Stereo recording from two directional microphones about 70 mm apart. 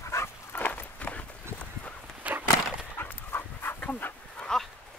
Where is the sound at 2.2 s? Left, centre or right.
Right.